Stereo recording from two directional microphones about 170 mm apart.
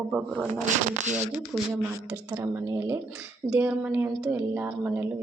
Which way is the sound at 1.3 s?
10° right (ahead or behind).